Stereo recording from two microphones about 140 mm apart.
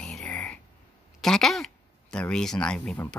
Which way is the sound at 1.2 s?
5° left (ahead or behind).